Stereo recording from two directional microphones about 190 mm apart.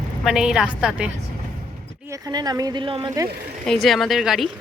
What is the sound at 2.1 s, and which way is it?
Speech, 20° right (ahead or behind).